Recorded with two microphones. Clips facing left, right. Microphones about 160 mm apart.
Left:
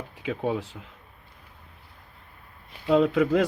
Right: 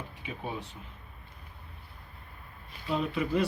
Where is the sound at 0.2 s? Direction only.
90° left.